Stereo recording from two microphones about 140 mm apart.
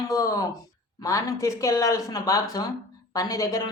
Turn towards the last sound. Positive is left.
turn(degrees=25)  # may be behind; listen again after turning